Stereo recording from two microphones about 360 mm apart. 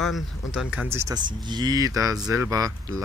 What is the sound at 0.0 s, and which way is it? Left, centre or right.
Speech, centre.